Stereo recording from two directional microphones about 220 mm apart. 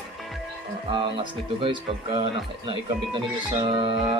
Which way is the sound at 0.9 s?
20° right (ahead or behind).